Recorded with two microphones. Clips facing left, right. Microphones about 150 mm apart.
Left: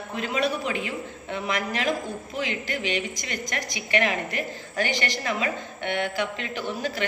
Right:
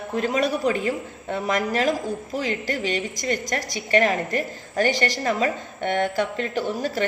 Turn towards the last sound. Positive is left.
turn(degrees=-45)  # may be behind; listen again after turning